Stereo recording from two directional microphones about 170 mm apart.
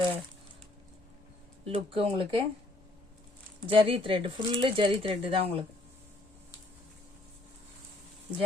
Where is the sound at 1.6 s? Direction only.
35° right (ahead or behind).